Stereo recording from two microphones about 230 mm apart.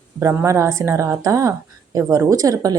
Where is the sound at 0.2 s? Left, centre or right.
Centre.